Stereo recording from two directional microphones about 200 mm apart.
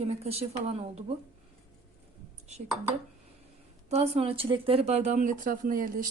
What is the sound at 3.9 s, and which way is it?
Speech, 30° right (ahead or behind).